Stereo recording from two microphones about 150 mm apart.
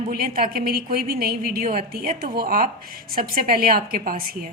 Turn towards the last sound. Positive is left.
turn(degrees=-75)  # may be behind; listen again after turning